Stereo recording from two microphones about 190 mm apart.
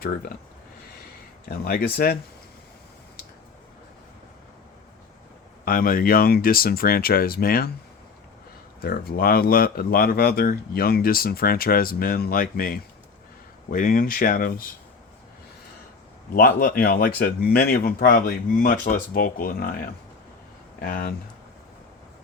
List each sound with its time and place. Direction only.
1.5 s speech: 55° left (ahead or behind)
5.6 s speech: 50° left (ahead or behind)
8.8 s speech: 50° left (ahead or behind)
16.3 s speech: 50° left (ahead or behind)